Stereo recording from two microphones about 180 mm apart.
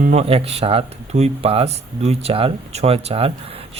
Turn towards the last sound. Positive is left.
turn(degrees=-35)  # may be behind; listen again after turning